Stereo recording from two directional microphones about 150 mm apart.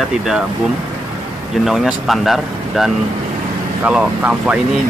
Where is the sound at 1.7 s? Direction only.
Centre (ahead or behind).